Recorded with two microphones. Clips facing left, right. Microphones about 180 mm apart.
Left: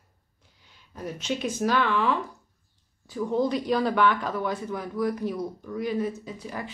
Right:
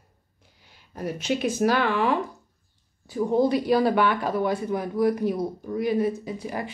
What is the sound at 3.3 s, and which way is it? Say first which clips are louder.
Speech: right 4 dB; 10° right (ahead or behind).